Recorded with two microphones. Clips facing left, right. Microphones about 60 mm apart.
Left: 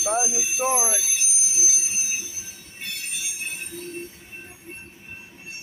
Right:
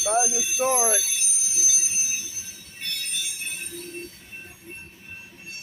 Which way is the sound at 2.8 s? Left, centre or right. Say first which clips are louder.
Right 1 dB; centre.